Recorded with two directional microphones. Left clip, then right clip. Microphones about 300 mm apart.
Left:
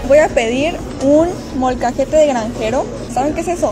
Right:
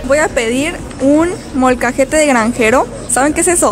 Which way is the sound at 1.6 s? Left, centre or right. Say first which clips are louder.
Right 4 dB; right.